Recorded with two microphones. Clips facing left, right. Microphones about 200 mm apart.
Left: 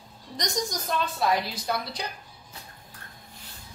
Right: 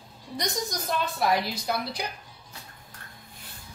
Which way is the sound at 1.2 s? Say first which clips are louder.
Right 1 dB; 10° right (ahead or behind).